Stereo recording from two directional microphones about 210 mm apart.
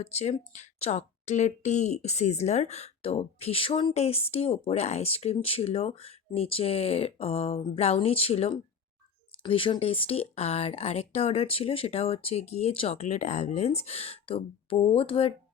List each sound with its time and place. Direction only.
0.0 s speech: 30° left (ahead or behind)